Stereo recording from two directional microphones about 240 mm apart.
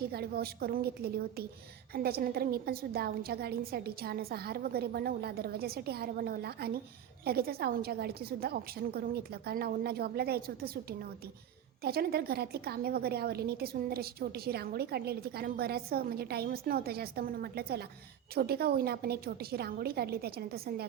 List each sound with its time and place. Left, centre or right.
0.1 s a woman's voice: right